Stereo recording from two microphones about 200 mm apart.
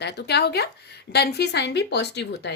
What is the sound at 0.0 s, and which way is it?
Speech, 55° left (ahead or behind).